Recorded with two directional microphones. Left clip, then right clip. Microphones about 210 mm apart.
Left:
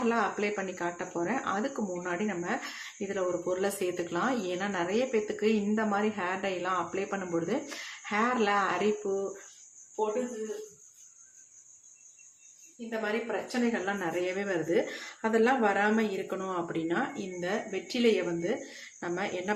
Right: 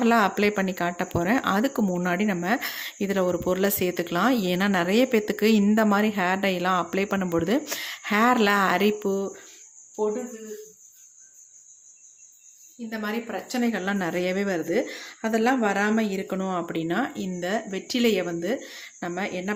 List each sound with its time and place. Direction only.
0.0 s speech: 50° right (ahead or behind)
12.9 s speech: 50° right (ahead or behind)